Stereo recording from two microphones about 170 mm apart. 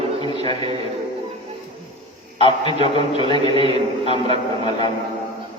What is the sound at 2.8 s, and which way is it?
A man's voice, 30° left (ahead or behind).